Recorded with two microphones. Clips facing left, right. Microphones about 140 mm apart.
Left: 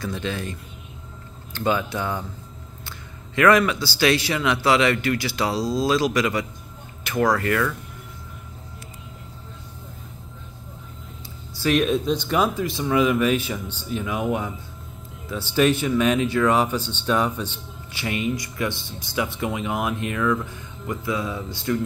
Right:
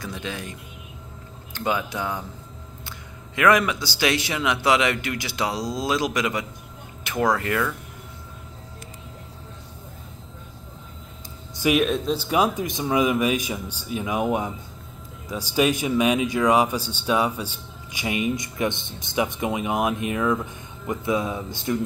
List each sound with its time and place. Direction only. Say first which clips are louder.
0.0 s speech: left 4 dB; 15° right (ahead or behind)
3.3 s a man's voice: left 2 dB; 15° right (ahead or behind)
7.0 s a sound: left 3 dB; 20° right (ahead or behind)
7.3 s speech: left 2 dB; 15° right (ahead or behind)
11.7 s speech: left 2 dB; centre (ahead or behind); by 14.5 s 20° right (ahead or behind)
15.5 s a man's voice: left 2 dB; 10° right (ahead or behind)